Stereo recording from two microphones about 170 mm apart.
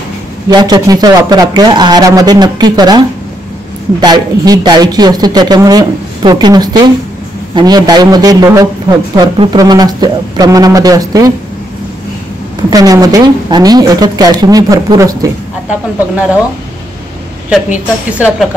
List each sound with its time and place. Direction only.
0.5 s a man's voice: 25° right (ahead or behind)
4.0 s a man's voice: 25° right (ahead or behind)
12.6 s a man's voice: 20° right (ahead or behind)
17.5 s a woman's voice: 10° right (ahead or behind)